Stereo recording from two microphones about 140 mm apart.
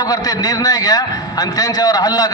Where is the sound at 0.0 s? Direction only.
25° left (ahead or behind).